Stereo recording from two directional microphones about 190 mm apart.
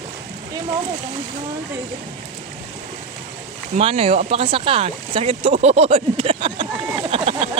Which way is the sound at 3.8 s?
30° right (ahead or behind).